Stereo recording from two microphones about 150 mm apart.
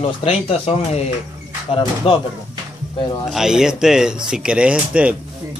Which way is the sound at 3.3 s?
5° right (ahead or behind).